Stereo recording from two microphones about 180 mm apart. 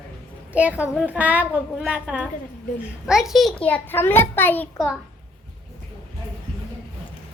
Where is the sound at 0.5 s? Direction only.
5° right (ahead or behind); by 4.6 s 10° left (ahead or behind).